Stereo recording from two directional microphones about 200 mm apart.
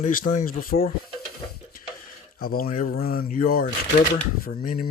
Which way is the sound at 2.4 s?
45° left (ahead or behind).